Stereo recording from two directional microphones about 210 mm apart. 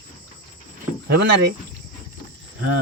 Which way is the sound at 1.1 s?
50° right (ahead or behind).